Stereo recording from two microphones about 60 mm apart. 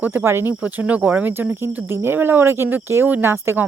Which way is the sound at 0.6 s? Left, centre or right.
Right.